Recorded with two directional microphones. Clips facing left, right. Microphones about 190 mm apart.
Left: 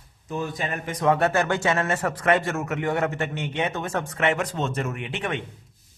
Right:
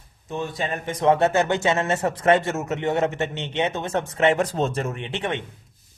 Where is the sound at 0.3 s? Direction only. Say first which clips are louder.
Right 1 dB; 25° right (ahead or behind).